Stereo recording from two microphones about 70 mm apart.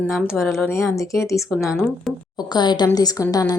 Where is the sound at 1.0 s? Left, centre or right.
Left.